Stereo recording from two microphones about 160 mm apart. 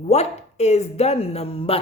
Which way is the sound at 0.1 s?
40° left (ahead or behind).